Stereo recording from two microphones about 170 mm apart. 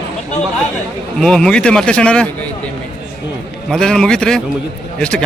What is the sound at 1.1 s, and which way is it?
Speech, 5° left (ahead or behind).